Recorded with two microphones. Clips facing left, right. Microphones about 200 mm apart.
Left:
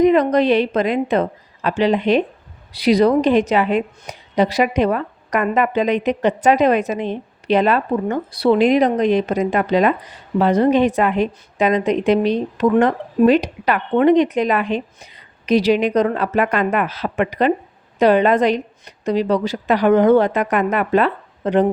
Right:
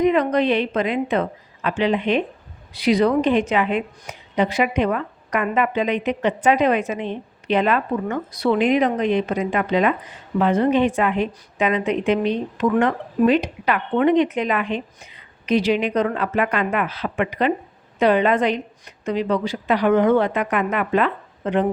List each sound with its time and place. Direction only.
0.0 s a woman's voice: 40° left (ahead or behind)